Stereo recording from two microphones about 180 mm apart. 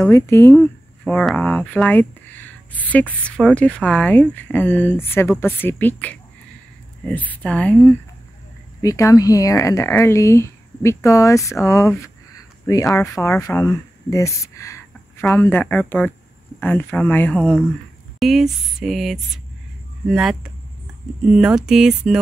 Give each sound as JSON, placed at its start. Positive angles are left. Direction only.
{"t": 0.0, "sound": "speech", "side_deg": 15}